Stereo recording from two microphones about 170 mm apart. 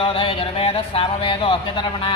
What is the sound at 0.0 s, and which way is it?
Speech, 30° left (ahead or behind).